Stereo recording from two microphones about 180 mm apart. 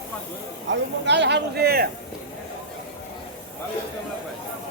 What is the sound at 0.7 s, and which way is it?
Speech, 75° right (ahead or behind).